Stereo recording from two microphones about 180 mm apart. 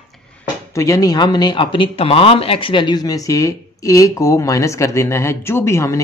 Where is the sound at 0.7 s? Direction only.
20° left (ahead or behind).